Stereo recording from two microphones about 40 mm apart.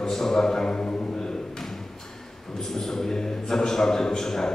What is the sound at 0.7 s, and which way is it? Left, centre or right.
Music, left.